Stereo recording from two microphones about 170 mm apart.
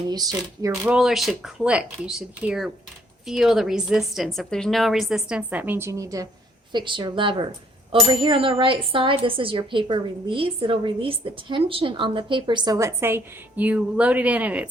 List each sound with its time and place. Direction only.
0.1 s speech: 20° right (ahead or behind)
0.7 s a woman's voice: 5° right (ahead or behind)